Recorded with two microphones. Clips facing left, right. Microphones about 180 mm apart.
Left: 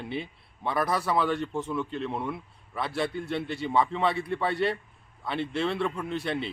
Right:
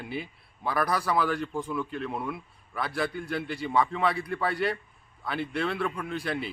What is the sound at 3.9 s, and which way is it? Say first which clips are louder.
Speech: left 1 dB; 25° left (ahead or behind).